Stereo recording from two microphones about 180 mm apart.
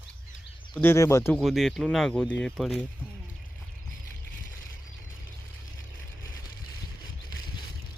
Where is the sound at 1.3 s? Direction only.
Centre (ahead or behind).